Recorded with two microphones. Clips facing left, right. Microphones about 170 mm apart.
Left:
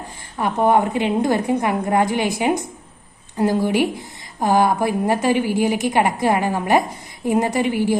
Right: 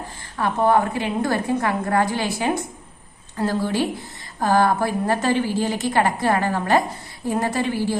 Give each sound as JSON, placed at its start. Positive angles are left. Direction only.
{"t": 0.3, "sound": "a woman's voice", "side_deg": 15}